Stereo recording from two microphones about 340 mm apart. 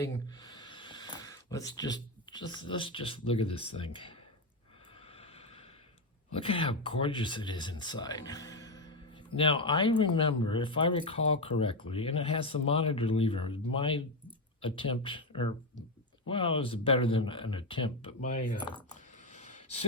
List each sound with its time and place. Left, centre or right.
0.0 s speech: centre
6.3 s speech: centre
19.3 s a sound: centre